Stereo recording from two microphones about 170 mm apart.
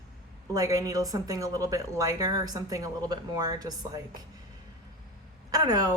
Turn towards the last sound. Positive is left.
turn(degrees=-25)  # may be behind; listen again after turning